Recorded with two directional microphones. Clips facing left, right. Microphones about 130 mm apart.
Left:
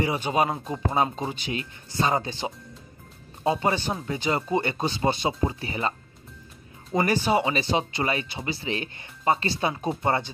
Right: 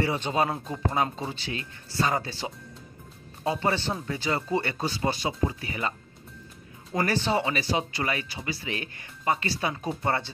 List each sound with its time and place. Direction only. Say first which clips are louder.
0.0 s speech: left 2 dB; 15° left (ahead or behind); by 5.9 s 30° left (ahead or behind)
7.0 s speech: left 3 dB; 15° left (ahead or behind)
7.5 s speech: left 3 dB; 25° left (ahead or behind)